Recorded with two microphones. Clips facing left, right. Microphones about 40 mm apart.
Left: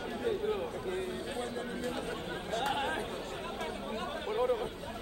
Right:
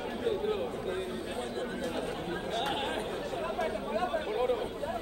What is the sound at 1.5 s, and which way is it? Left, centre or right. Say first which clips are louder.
Chatter: right 2 dB; right.